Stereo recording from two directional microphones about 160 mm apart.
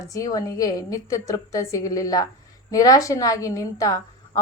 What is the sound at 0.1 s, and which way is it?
A woman's voice, 20° left (ahead or behind).